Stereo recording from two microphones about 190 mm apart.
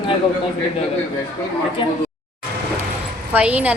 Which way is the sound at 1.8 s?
25° left (ahead or behind).